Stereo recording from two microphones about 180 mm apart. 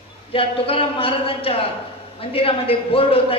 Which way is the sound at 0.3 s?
30° left (ahead or behind).